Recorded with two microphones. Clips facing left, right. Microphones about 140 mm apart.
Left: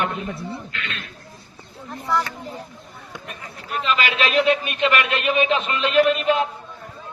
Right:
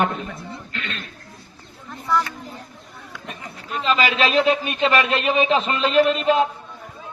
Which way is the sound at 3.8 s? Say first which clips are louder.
Right 3 dB; 35° right (ahead or behind).